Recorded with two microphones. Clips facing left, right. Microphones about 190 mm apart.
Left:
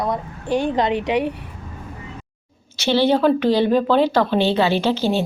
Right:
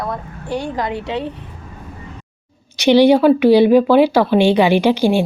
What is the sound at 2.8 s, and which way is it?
Speech, 15° right (ahead or behind).